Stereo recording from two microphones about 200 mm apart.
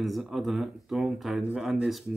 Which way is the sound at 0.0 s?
Centre (ahead or behind).